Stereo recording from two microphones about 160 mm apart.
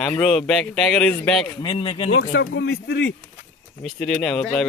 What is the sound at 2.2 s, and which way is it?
Speech, 90° left.